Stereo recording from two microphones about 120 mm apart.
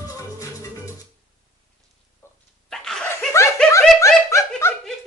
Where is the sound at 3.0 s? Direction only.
25° left (ahead or behind).